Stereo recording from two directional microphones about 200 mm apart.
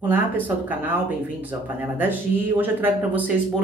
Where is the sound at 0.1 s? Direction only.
10° right (ahead or behind).